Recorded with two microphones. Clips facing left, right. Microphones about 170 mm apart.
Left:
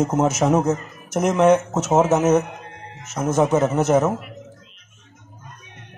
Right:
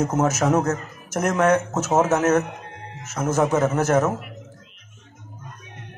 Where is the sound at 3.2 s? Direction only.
15° left (ahead or behind).